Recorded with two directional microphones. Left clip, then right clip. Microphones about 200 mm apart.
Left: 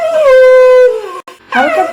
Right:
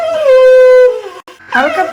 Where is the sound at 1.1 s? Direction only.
15° left (ahead or behind).